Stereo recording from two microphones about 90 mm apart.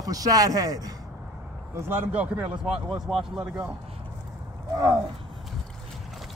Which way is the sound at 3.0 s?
5° right (ahead or behind).